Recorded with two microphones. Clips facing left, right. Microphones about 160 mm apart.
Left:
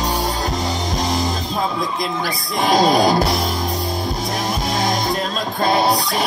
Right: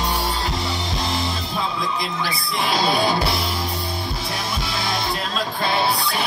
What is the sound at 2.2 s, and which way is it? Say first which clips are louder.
Speech: left 6 dB; 45° left (ahead or behind).